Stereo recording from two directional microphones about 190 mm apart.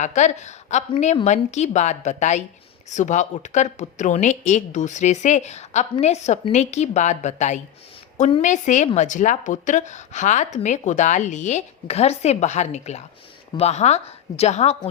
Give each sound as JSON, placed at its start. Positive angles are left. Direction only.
{"t": 0.0, "sound": "a woman's voice", "side_deg": 40}